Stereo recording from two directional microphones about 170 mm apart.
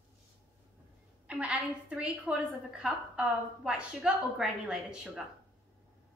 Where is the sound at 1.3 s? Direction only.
10° right (ahead or behind).